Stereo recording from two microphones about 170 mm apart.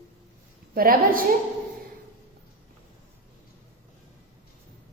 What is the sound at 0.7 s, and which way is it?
Speech, 55° right (ahead or behind).